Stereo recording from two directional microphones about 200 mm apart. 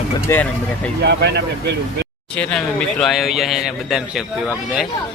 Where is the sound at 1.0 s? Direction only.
55° right (ahead or behind).